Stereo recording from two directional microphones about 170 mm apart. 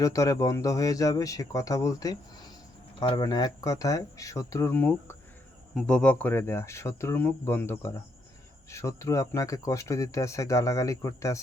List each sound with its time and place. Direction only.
0.0 s speech: 20° left (ahead or behind)